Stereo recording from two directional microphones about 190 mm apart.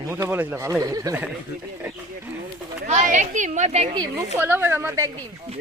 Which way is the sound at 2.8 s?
40° right (ahead or behind).